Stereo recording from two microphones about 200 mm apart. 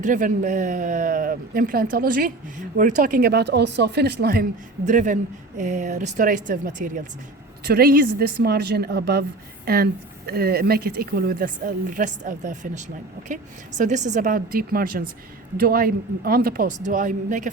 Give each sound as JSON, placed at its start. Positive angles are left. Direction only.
{"t": 0.0, "sound": "speech", "side_deg": -40}
{"t": 4.9, "sound": "speech", "side_deg": -40}
{"t": 7.6, "sound": "speech", "side_deg": -55}